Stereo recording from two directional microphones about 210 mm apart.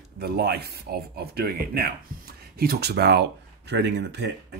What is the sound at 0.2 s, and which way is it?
Speech, 50° right (ahead or behind).